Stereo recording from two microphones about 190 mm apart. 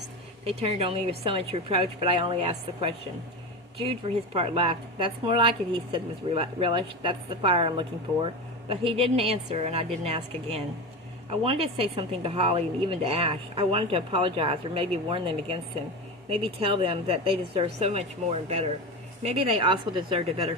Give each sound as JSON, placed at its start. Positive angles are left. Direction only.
{"t": 0.6, "sound": "a woman's voice", "side_deg": -30}
{"t": 4.4, "sound": "a woman's voice", "side_deg": -30}